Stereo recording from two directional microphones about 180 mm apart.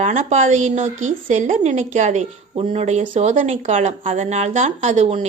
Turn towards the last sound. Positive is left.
turn(degrees=-40)  # may be behind; listen again after turning